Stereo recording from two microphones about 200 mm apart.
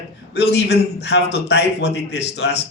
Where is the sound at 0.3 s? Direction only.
60° left (ahead or behind).